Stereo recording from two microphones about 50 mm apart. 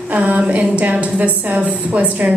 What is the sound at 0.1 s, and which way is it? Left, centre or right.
A woman's voice, right.